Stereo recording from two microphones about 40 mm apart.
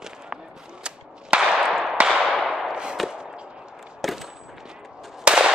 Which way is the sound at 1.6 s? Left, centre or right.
Centre.